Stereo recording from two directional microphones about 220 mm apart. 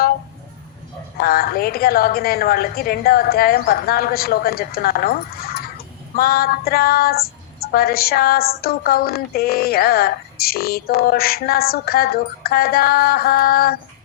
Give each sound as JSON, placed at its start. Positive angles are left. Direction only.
{"t": 1.2, "sound": "a woman's voice", "side_deg": 45}